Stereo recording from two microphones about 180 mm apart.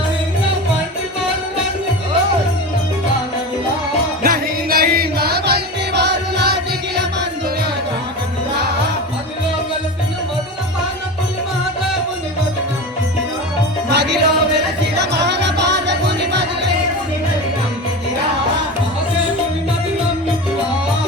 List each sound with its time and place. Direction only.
4.2 s music: 55° right (ahead or behind)
13.9 s music: 70° right (ahead or behind)